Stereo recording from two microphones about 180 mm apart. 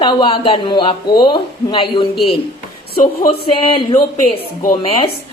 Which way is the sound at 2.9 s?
50° left (ahead or behind).